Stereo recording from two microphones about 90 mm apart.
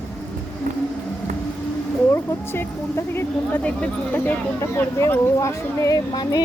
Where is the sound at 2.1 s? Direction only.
25° left (ahead or behind).